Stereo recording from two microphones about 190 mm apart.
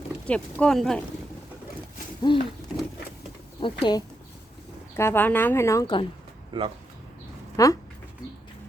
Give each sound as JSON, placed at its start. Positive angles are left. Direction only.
{"t": 0.3, "sound": "speech", "side_deg": 5}
{"t": 2.3, "sound": "speech", "side_deg": 25}
{"t": 3.6, "sound": "speech", "side_deg": 25}
{"t": 4.9, "sound": "speech", "side_deg": 10}
{"t": 6.5, "sound": "speech", "side_deg": -25}
{"t": 7.5, "sound": "speech", "side_deg": 15}